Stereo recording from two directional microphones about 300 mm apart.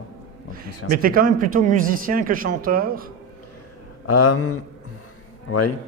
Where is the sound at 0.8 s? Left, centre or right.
Right.